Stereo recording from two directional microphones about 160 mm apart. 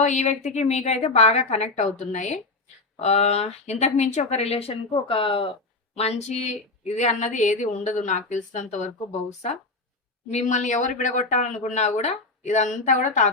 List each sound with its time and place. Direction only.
0.0 s speech: 45° left (ahead or behind)
10.3 s speech: 50° left (ahead or behind)